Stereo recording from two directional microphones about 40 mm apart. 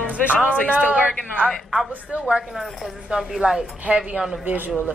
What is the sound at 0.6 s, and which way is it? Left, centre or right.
Speech, right.